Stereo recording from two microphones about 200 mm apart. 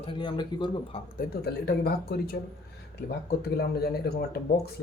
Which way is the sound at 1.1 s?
50° left (ahead or behind).